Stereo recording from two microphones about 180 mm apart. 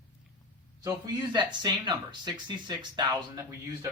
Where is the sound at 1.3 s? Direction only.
25° right (ahead or behind).